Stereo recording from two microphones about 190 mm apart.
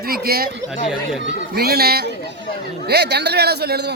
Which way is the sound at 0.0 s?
55° right (ahead or behind).